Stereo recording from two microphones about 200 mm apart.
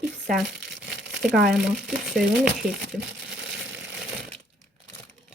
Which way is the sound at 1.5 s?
5° right (ahead or behind).